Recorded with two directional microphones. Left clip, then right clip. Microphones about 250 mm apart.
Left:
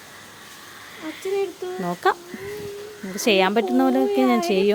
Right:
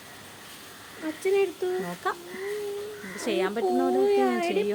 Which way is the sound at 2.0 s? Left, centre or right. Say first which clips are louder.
Left 12 dB; left.